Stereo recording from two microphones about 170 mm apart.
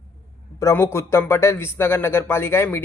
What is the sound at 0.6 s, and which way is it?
Speech, 15° left (ahead or behind).